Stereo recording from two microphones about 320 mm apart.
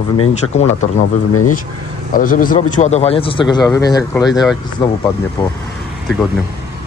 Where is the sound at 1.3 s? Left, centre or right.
Left.